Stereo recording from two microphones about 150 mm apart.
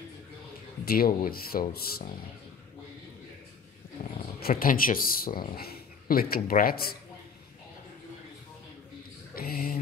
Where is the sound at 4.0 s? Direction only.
65° left (ahead or behind).